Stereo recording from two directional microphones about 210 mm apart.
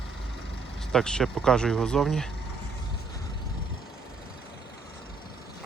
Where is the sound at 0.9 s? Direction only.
Centre (ahead or behind).